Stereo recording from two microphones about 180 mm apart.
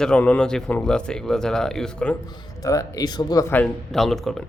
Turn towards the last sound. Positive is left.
turn(degrees=0)  # may be behind; listen again after turning